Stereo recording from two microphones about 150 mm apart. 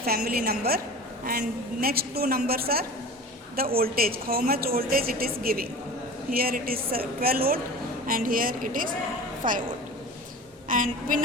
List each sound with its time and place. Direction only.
0.0 s a woman's voice: 90° right; by 9.6 s 65° right (ahead or behind)
10.7 s a woman's voice: 65° right (ahead or behind)